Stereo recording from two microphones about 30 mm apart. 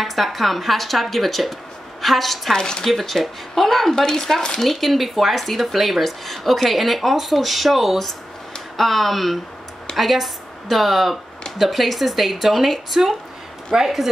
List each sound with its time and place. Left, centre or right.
0.0 s speech: centre
2.5 s speech: left
2.8 s speech: centre
3.9 s speech: centre
4.6 s speech: centre